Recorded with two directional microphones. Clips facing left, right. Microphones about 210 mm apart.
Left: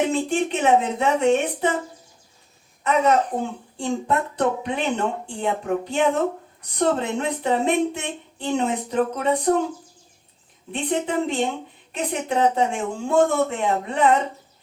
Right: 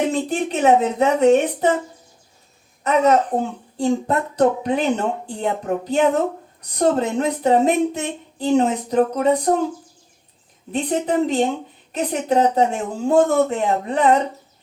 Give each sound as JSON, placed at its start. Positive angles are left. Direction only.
{"t": 0.1, "sound": "speech", "side_deg": -40}
{"t": 2.8, "sound": "a child's voice", "side_deg": -40}
{"t": 10.7, "sound": "speech", "side_deg": -40}